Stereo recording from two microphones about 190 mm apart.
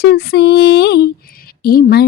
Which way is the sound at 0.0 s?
60° left (ahead or behind).